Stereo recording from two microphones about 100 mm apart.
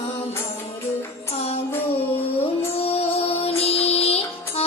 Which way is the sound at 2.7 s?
80° left.